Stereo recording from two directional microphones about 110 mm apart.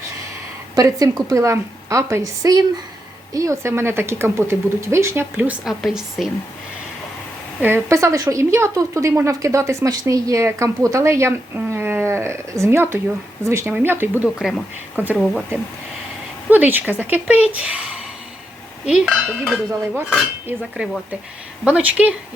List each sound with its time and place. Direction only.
0.8 s a woman's voice: 30° right (ahead or behind)
5.6 s a woman's voice: 5° right (ahead or behind)
7.6 s a woman's voice: 25° right (ahead or behind)
14.3 s a woman's voice: centre (ahead or behind)
16.5 s dishes: 15° right (ahead or behind)
17.5 s speech: 10° right (ahead or behind)
18.9 s dishes: 10° right (ahead or behind)
21.6 s dishes: 10° right (ahead or behind)